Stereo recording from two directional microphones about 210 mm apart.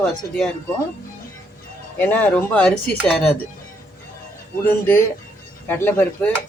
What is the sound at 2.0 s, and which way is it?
Speech, 10° left (ahead or behind).